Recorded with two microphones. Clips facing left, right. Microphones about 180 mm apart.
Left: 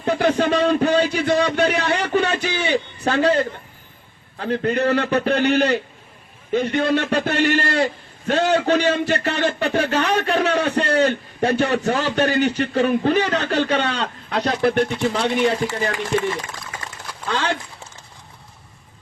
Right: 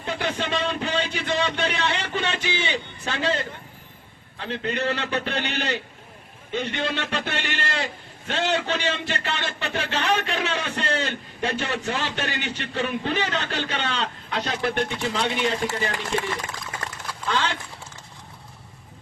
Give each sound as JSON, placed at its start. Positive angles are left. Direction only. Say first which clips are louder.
{"t": 0.0, "sound": "a man's voice", "louder": "left 9 dB", "side_deg": 40}
{"t": 17.2, "sound": "a man's voice", "louder": "left 3 dB", "side_deg": 40}